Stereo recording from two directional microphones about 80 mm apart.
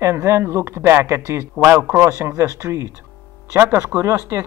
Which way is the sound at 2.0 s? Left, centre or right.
Right.